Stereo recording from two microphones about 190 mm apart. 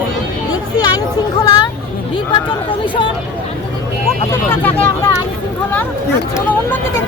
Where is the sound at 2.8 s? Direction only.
25° left (ahead or behind).